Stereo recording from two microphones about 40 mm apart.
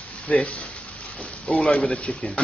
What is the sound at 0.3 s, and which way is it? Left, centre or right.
Stir, left.